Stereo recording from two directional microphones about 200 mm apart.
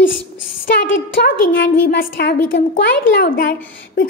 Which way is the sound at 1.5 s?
60° left (ahead or behind).